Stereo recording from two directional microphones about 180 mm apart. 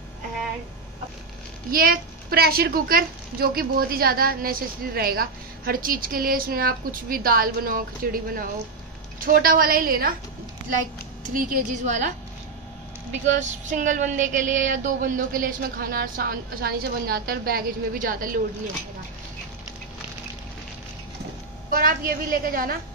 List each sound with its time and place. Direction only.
1.7 s a woman's voice: 55° right (ahead or behind)
11.3 s a woman's voice: 50° right (ahead or behind)
13.3 s a woman's voice: 45° right (ahead or behind)
21.6 s a woman's voice: 50° right (ahead or behind)